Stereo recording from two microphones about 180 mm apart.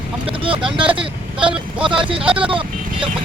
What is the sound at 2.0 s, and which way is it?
Speech, 30° right (ahead or behind).